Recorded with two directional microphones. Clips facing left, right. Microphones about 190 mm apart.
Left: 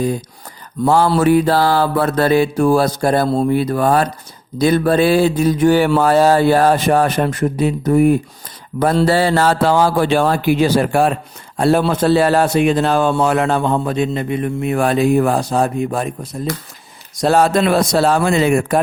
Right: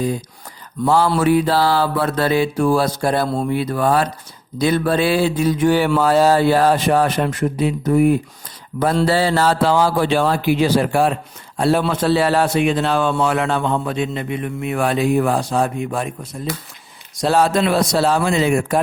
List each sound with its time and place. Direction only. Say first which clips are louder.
0.9 s a man's voice: left 2 dB; 45° left (ahead or behind)
17.2 s a man's voice: left 3 dB; 50° left (ahead or behind)